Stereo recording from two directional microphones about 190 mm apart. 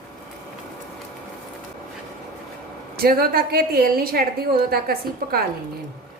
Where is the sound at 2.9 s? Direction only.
50° right (ahead or behind).